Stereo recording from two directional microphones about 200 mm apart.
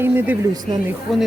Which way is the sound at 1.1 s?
Centre (ahead or behind).